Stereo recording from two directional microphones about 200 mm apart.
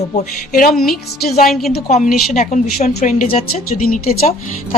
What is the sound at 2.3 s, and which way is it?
A woman's voice, 40° left (ahead or behind).